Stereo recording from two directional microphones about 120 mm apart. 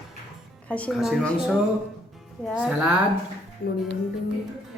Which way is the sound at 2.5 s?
10° right (ahead or behind).